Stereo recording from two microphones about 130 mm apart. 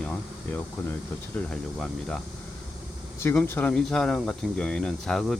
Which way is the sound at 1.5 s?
5° left (ahead or behind).